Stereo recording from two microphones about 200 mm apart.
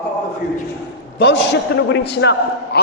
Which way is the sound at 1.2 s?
60° left (ahead or behind).